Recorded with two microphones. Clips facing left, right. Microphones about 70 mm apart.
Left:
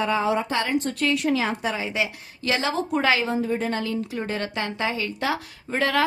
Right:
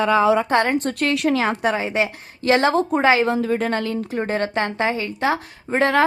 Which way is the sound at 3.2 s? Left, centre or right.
Right.